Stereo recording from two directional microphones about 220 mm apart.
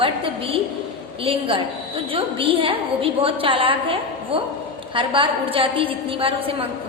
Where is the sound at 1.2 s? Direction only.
25° right (ahead or behind).